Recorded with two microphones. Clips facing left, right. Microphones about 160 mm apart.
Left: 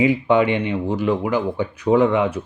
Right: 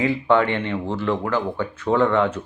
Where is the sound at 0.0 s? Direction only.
15° left (ahead or behind).